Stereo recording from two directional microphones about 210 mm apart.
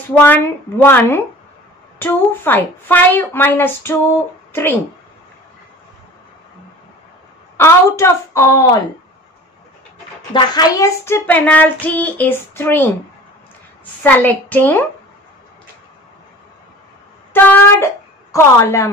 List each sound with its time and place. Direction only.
0.2 s speech: 10° left (ahead or behind)
7.5 s speech: 10° left (ahead or behind)
10.3 s speech: 20° left (ahead or behind)
14.0 s speech: 10° left (ahead or behind)
17.3 s speech: 10° left (ahead or behind)